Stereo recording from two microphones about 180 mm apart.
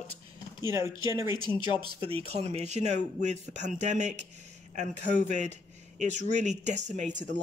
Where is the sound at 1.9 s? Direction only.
30° right (ahead or behind).